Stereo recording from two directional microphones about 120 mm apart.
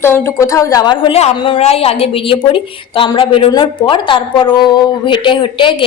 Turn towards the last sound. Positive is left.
turn(degrees=45)  # may be behind; listen again after turning